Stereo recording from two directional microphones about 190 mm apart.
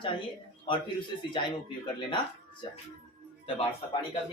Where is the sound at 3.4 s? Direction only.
30° left (ahead or behind).